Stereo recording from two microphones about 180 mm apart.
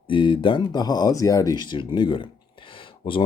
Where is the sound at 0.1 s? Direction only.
25° left (ahead or behind).